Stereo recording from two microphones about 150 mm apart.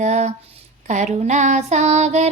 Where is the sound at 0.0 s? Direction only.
50° right (ahead or behind).